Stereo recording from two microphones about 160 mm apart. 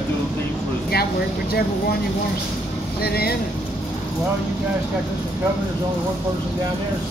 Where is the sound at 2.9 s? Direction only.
75° left (ahead or behind).